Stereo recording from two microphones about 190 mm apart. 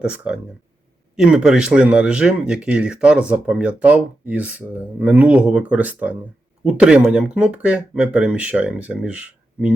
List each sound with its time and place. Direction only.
0.0 s speech: 5° right (ahead or behind)